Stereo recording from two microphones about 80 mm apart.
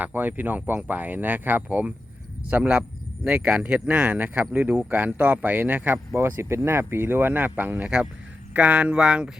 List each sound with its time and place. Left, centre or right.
0.0 s speech: right